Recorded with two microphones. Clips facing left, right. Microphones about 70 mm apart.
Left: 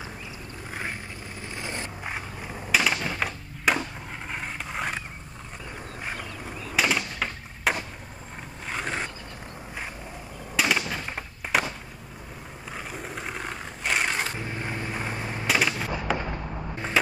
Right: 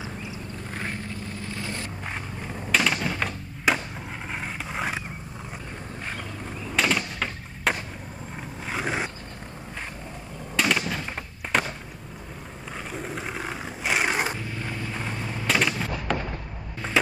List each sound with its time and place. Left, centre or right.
1.6 s vehicle: left
2.0 s skateboard: centre
4.3 s vehicle: centre
6.7 s a sound: centre
10.5 s fireworks: centre
12.7 s a sound: centre
14.4 s vehicle: left
15.4 s fireworks: centre
17.0 s a sound: centre